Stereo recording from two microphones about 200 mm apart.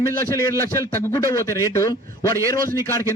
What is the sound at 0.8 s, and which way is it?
A man's voice, 15° left (ahead or behind).